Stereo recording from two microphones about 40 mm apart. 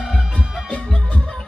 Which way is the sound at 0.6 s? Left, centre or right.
Left.